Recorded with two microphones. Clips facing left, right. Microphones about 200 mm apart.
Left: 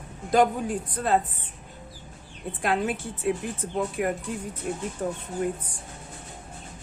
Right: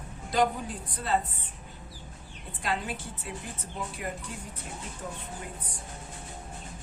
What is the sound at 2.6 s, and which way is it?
A woman's voice, 55° left (ahead or behind).